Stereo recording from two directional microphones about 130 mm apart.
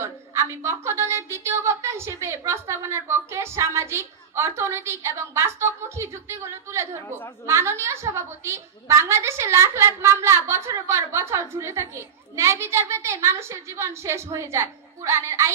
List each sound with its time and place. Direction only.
0.0 s a woman's voice: 20° right (ahead or behind)